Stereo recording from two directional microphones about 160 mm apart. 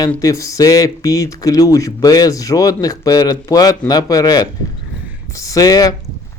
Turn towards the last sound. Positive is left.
turn(degrees=25)  # may be behind; listen again after turning